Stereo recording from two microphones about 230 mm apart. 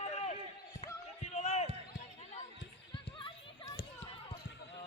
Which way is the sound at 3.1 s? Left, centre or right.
Left.